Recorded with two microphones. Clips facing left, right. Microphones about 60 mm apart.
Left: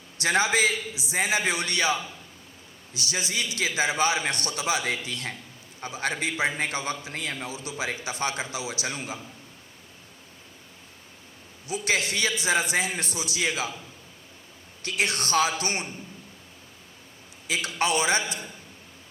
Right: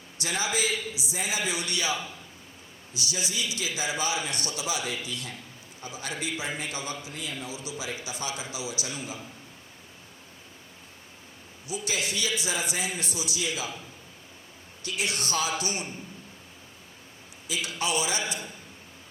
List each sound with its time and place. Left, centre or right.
0.2 s a man's voice: left
2.9 s a man's voice: left
11.7 s a man's voice: left
14.8 s a man's voice: left
17.5 s a man's voice: left